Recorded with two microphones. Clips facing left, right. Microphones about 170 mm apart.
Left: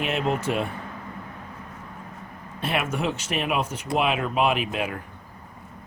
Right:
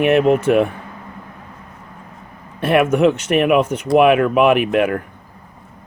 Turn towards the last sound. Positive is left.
turn(degrees=-60)  # may be behind; listen again after turning